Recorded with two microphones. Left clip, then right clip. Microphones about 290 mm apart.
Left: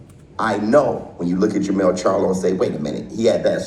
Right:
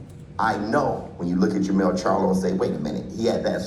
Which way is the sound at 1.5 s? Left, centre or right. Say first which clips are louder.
Left 5 dB; centre.